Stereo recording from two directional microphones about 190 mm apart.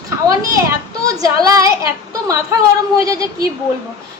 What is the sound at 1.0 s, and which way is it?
A woman's voice, 20° right (ahead or behind).